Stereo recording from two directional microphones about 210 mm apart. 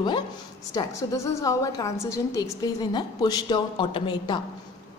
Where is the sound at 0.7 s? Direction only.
15° left (ahead or behind).